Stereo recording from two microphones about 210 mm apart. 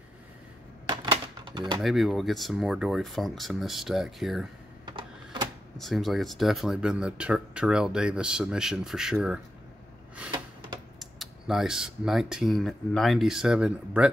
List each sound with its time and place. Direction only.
0.8 s a sound: 20° right (ahead or behind)
1.8 s speech: centre (ahead or behind)
4.8 s typewriter: 20° right (ahead or behind)
5.8 s speech: centre (ahead or behind)
11.0 s speech: centre (ahead or behind)